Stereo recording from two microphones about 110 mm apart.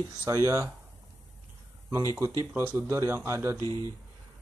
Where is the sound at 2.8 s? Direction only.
25° right (ahead or behind).